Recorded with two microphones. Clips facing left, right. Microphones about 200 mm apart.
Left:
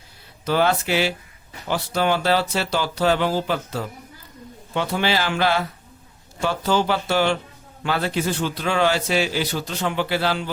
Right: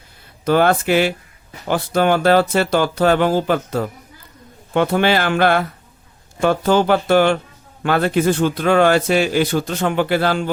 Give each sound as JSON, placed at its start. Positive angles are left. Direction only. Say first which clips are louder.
{"t": 0.4, "sound": "a man's voice", "louder": "right 5 dB", "side_deg": -55}